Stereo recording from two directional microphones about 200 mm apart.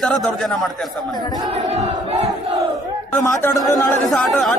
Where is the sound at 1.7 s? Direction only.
35° right (ahead or behind).